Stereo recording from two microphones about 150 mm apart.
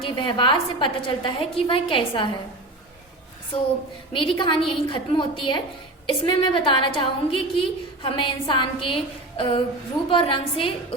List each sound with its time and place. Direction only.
0.0 s a woman's voice: 35° left (ahead or behind)
4.1 s a woman's voice: 35° left (ahead or behind)